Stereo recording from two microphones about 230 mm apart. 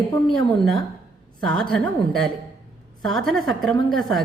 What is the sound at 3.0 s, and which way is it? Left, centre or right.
A woman's voice, centre.